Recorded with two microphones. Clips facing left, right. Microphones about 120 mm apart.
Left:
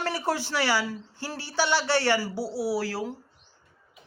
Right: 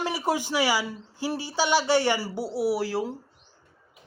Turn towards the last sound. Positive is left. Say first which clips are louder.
# right 3 dB
turn(degrees=-20)  # may be behind; listen again after turning